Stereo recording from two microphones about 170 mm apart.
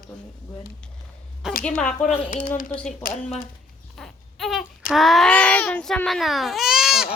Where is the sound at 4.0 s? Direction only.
Centre (ahead or behind).